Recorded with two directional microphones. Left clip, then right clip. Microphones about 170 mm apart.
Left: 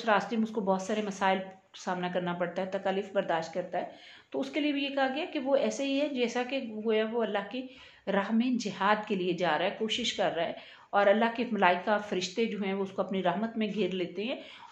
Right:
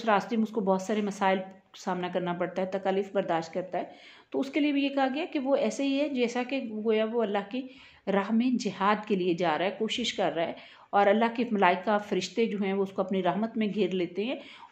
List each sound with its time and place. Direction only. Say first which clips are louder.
0.0 s a woman's voice: right 1 dB; 50° right (ahead or behind)